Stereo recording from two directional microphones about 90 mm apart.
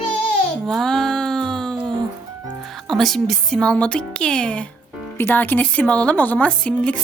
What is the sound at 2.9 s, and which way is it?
Speech, 5° left (ahead or behind).